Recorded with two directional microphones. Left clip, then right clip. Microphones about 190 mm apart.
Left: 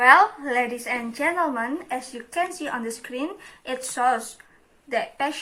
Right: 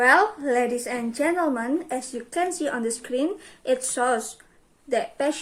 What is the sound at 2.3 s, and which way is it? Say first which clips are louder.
Speech: right 1 dB; 35° left (ahead or behind).